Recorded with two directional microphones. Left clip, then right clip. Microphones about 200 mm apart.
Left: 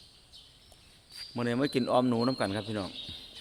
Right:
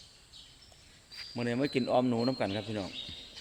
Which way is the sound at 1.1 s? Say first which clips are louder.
Left 2 dB; 20° left (ahead or behind).